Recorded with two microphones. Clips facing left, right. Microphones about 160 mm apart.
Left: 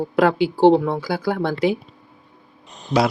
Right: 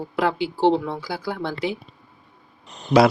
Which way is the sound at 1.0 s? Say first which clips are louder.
Left 6 dB; 80° left.